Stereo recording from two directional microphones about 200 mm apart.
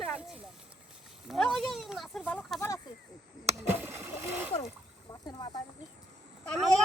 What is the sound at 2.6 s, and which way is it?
Speech, 15° left (ahead or behind).